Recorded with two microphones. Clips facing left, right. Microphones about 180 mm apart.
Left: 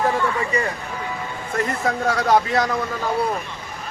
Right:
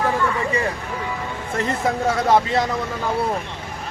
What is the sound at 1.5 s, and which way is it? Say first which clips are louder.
Speech: right 1 dB; 25° right (ahead or behind).